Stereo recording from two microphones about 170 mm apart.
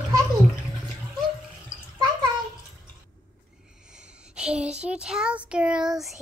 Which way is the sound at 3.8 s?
5° right (ahead or behind).